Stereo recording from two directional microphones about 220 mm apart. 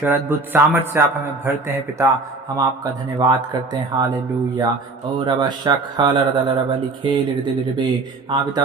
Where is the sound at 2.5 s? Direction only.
20° right (ahead or behind).